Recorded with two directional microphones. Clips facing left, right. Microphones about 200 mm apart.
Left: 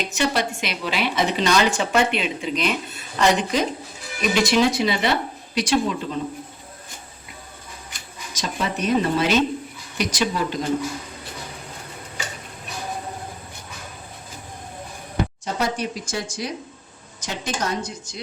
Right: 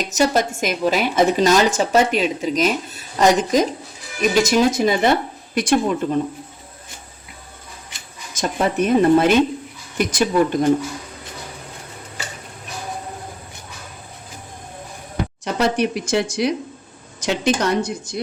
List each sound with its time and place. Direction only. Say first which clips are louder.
0.0 s a woman's voice: right 5 dB; 40° right (ahead or behind)
8.3 s speech: right 6 dB; 50° right (ahead or behind)
15.4 s speech: right 9 dB; 75° right (ahead or behind)